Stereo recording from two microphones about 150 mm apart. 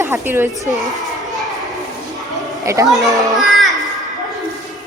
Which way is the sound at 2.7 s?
20° right (ahead or behind).